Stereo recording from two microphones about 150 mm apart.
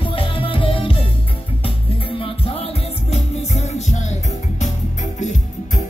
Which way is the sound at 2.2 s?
40° left (ahead or behind).